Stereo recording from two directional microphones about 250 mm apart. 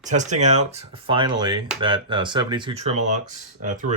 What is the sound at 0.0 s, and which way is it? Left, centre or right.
Speech, right.